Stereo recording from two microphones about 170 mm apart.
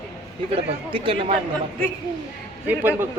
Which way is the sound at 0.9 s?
30° right (ahead or behind).